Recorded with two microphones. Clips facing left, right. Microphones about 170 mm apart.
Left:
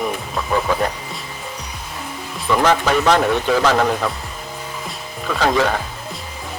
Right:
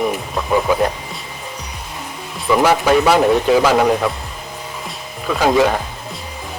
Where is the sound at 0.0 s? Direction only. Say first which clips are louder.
Right 3 dB; 10° right (ahead or behind).